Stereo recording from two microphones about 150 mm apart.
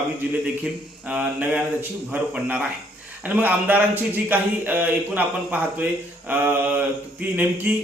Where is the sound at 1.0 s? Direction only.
10° right (ahead or behind).